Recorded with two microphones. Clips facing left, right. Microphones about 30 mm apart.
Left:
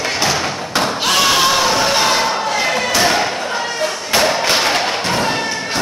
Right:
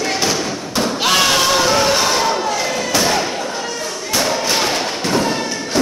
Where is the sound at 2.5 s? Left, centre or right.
Left.